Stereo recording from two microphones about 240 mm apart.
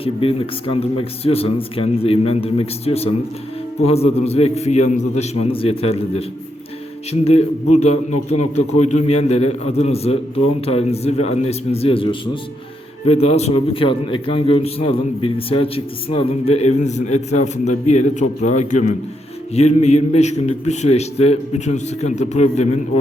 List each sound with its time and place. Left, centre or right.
0.0 s a man's voice: left
15.2 s a man's voice: left